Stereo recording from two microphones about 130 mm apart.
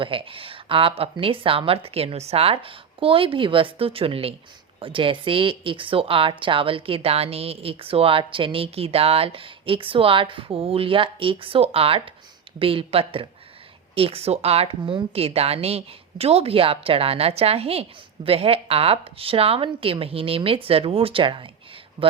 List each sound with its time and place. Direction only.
0.0 s speech: 45° right (ahead or behind)